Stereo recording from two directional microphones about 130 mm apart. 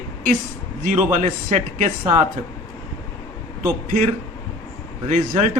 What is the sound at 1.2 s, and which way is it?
Speech, 75° right (ahead or behind).